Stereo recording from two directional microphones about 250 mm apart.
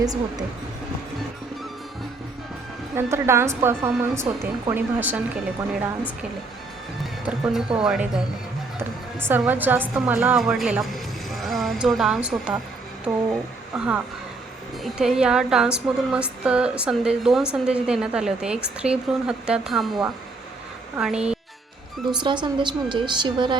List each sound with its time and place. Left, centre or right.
0.0 s speech: centre
2.9 s speech: centre
7.0 s a woman's voice: centre
9.2 s a woman's voice: centre
13.7 s a woman's voice: centre
22.1 s a woman's voice: centre